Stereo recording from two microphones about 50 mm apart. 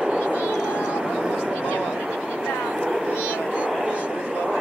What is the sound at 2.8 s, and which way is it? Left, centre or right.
Vehicle, right.